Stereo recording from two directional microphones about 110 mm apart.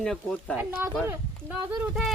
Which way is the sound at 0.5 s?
15° right (ahead or behind).